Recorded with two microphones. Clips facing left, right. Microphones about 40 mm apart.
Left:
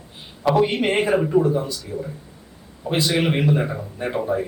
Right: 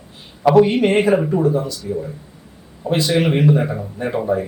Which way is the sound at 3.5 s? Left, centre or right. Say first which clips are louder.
Right 4 dB; centre.